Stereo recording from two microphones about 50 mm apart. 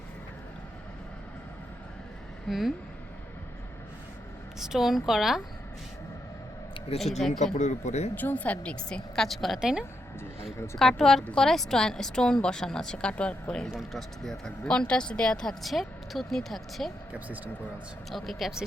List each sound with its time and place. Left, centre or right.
2.5 s speech: centre
4.6 s speech: centre
7.0 s speech: centre
8.1 s speech: left
8.6 s speech: centre
9.6 s speech: centre
10.8 s speech: centre
13.7 s speech: centre
14.4 s speech: centre
15.6 s speech: centre
17.2 s speech: right
18.1 s speech: centre